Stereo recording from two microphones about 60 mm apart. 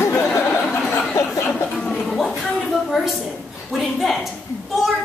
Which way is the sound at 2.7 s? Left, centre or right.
Centre.